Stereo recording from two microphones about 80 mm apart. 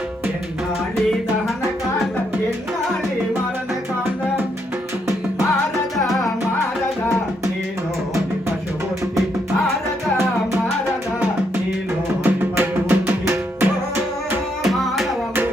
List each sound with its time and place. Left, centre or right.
6.0 s music: centre
12.2 s music: right
14.6 s music: centre